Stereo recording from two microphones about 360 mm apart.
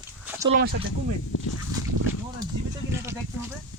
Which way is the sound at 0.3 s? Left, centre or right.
Centre.